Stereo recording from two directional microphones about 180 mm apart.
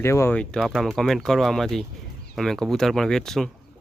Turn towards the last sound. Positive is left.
turn(degrees=0)  # may be behind; listen again after turning